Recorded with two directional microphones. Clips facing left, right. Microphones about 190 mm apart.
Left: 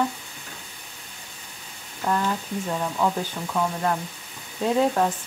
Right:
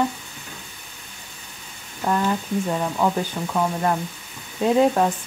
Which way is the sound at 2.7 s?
20° right (ahead or behind).